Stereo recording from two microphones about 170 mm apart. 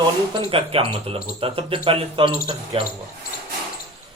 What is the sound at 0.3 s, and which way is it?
Speech, 35° right (ahead or behind).